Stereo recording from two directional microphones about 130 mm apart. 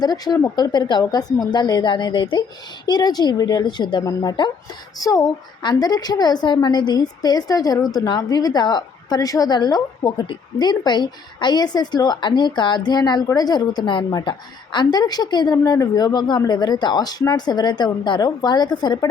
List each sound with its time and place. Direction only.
0.0 s a woman's voice: 30° left (ahead or behind)